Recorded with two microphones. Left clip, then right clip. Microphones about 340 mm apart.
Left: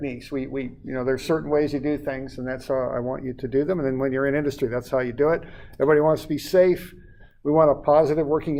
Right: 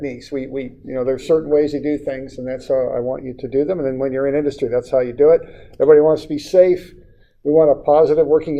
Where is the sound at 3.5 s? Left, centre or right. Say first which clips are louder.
Right 5 dB; left.